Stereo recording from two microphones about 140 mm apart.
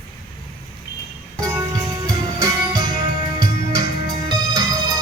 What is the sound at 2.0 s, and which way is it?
Music, 30° right (ahead or behind).